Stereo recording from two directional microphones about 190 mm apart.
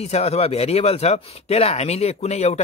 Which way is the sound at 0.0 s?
35° left (ahead or behind).